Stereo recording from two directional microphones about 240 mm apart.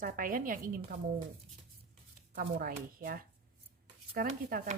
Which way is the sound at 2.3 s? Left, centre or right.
Right.